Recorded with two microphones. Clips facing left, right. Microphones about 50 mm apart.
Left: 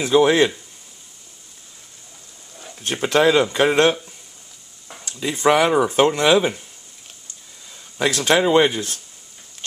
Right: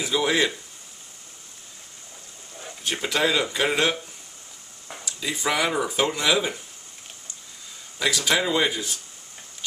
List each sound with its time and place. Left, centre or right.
0.0 s speech: left
2.8 s speech: left
5.0 s speech: left
8.0 s speech: left